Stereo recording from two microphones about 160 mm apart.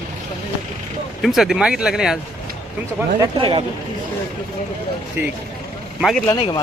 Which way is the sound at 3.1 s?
30° right (ahead or behind).